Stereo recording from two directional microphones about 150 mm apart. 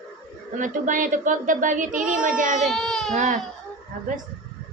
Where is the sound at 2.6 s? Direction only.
Centre (ahead or behind).